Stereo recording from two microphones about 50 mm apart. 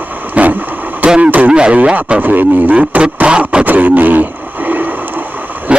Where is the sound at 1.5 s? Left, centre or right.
Centre.